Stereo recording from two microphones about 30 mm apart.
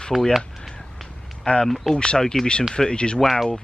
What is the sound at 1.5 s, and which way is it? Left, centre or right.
Speech, left.